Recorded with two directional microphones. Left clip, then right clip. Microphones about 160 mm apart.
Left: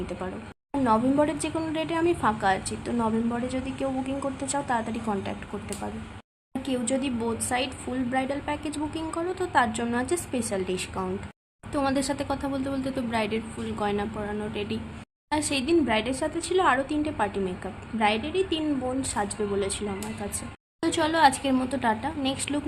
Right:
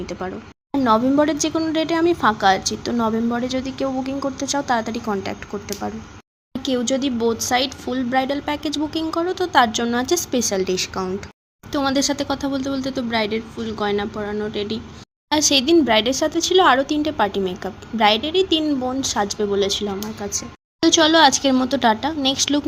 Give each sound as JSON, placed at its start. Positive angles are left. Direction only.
{"t": 0.0, "sound": "a woman's voice", "side_deg": -25}
{"t": 15.3, "sound": "a woman's voice", "side_deg": -40}
{"t": 20.8, "sound": "a woman's voice", "side_deg": -35}